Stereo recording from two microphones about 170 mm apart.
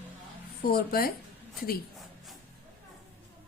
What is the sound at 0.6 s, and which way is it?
Speech, 65° left (ahead or behind).